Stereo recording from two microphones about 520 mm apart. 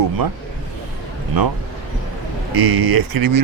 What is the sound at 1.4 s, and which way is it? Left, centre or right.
Speech, right.